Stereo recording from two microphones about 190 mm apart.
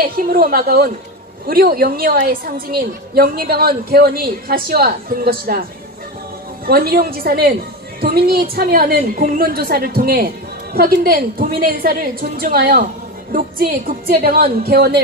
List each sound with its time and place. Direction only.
0.0 s a woman's voice: 50° right (ahead or behind)